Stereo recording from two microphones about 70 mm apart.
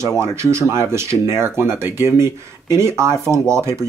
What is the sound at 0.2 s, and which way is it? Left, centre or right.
Speech, right.